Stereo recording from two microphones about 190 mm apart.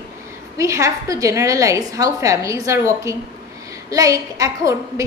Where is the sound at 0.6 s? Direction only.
15° right (ahead or behind).